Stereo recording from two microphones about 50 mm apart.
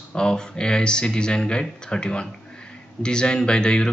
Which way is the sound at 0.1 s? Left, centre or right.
Centre.